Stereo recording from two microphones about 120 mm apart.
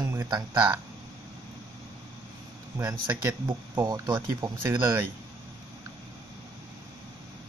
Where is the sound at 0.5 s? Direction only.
15° right (ahead or behind).